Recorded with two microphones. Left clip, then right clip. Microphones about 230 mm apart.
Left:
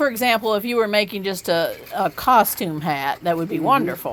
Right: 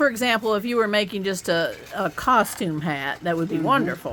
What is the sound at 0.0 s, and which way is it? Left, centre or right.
Speech, centre.